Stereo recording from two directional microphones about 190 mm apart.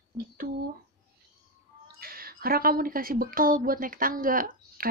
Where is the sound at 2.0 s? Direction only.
50° right (ahead or behind).